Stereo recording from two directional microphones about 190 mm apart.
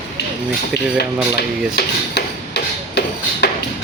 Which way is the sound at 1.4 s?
60° left (ahead or behind).